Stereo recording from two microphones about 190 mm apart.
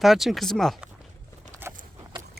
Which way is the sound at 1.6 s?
10° right (ahead or behind).